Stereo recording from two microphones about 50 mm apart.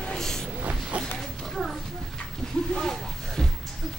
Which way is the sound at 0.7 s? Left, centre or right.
Right.